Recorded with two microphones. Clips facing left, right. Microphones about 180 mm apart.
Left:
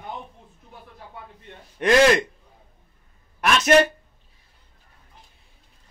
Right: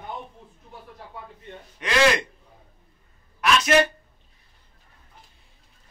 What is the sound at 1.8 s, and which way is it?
Speech, 50° left (ahead or behind).